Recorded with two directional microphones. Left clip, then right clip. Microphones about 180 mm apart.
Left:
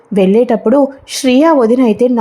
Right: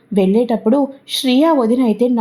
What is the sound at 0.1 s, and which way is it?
A woman's voice, 20° left (ahead or behind).